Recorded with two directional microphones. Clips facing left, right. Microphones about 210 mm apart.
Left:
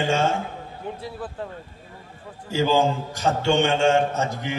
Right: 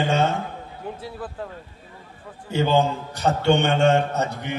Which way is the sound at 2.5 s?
60° right (ahead or behind).